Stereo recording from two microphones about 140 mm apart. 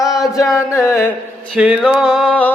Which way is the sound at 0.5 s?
20° left (ahead or behind).